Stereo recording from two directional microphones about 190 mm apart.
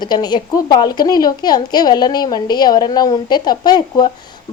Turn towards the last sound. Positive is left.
turn(degrees=20)  # may be behind; listen again after turning